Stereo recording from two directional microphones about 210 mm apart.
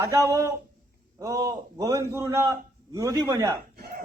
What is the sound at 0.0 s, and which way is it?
A man's voice, 15° right (ahead or behind).